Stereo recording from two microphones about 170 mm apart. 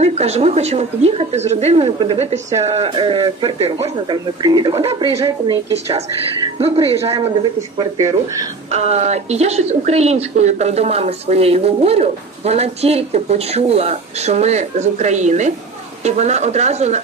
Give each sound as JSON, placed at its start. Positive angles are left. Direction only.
{"t": 0.0, "sound": "a woman's voice", "side_deg": -40}
{"t": 3.7, "sound": "speech", "side_deg": -20}
{"t": 6.6, "sound": "a woman's voice", "side_deg": -35}
{"t": 8.0, "sound": "speech", "side_deg": -20}
{"t": 8.7, "sound": "a woman's voice", "side_deg": -40}